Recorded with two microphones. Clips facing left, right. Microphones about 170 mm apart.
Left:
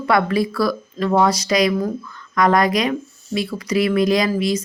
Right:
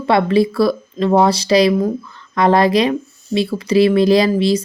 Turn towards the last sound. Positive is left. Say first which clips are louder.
# right 5 dB
turn(degrees=-30)  # may be behind; listen again after turning